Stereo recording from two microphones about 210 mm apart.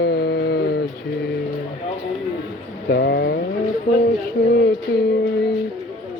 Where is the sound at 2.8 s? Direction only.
50° left (ahead or behind).